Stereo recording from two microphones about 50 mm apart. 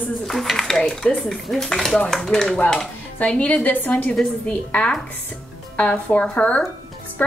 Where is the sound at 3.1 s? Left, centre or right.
Left.